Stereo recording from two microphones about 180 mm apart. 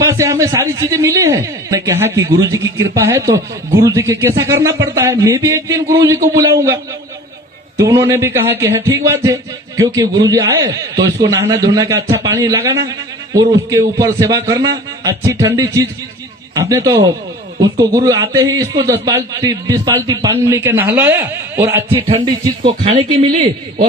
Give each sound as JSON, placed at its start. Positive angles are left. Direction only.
{"t": 0.0, "sound": "speech", "side_deg": -15}
{"t": 7.9, "sound": "a man's voice", "side_deg": -15}
{"t": 22.1, "sound": "speech", "side_deg": -30}